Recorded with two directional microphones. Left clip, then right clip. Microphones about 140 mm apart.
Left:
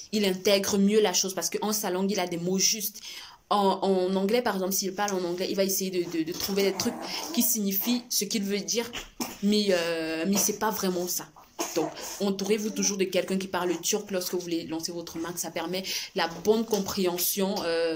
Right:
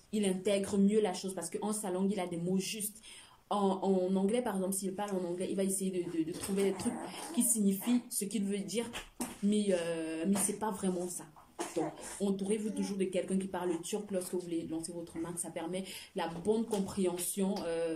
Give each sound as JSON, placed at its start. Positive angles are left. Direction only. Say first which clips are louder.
{"t": 0.1, "sound": "a woman's voice", "louder": "left 8 dB", "side_deg": -15}
{"t": 12.2, "sound": "a woman's voice", "louder": "left 7 dB", "side_deg": -15}